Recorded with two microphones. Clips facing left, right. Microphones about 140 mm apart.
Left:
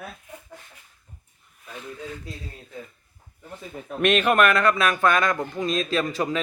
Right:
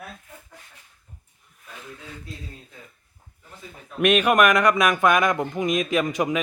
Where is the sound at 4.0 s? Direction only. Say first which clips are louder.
Right 1 dB; 10° right (ahead or behind).